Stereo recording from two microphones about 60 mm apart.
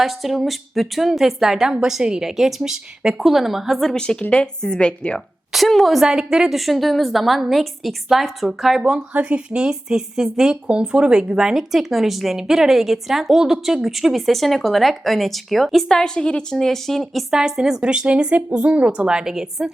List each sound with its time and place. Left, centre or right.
0.0 s speech: centre
4.0 s speech: centre
5.5 s speech: centre
9.1 s speech: centre